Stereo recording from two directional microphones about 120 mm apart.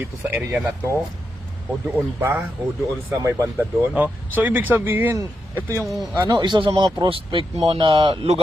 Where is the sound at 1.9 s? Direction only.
15° right (ahead or behind).